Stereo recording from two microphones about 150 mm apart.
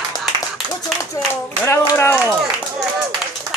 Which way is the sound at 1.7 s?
15° left (ahead or behind).